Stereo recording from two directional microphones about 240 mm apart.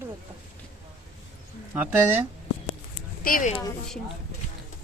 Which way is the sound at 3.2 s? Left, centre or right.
Left.